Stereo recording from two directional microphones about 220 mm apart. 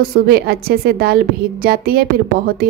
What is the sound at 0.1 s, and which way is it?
A woman's voice, 45° right (ahead or behind).